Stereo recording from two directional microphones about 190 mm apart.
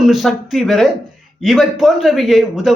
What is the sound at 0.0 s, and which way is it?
A woman's voice, centre (ahead or behind).